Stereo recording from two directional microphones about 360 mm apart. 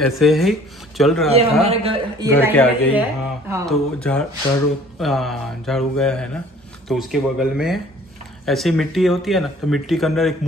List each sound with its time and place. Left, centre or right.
0.0 s speech: centre
1.3 s a man's voice: centre
2.5 s speech: centre